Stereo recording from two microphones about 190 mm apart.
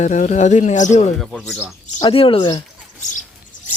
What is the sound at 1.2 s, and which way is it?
Speech, centre (ahead or behind).